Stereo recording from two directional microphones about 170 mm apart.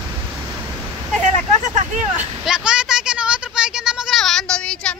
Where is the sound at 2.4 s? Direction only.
5° right (ahead or behind).